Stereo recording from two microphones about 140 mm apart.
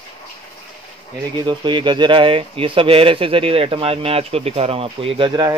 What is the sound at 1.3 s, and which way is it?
Speech, 35° right (ahead or behind).